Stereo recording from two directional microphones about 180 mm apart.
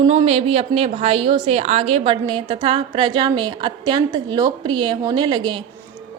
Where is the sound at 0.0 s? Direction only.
25° right (ahead or behind).